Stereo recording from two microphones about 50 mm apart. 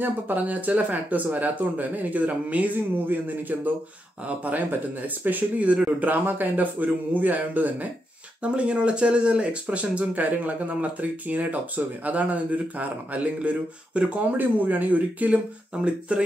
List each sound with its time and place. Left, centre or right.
0.0 s speech: right
8.4 s speech: right
14.3 s speech: right